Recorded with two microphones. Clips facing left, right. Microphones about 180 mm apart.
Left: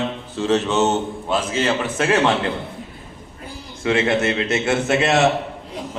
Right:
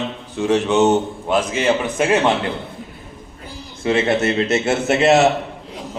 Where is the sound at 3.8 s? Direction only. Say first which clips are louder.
Right 1 dB; 30° right (ahead or behind).